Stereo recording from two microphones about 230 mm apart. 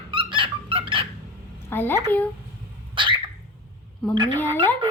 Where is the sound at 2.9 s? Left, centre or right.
Right.